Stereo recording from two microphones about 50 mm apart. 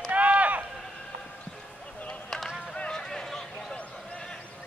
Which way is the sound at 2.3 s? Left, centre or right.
Centre.